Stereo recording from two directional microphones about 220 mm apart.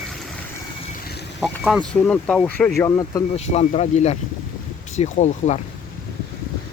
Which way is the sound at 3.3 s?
30° left (ahead or behind).